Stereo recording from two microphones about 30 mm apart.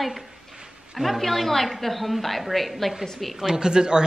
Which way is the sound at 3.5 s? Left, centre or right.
Right.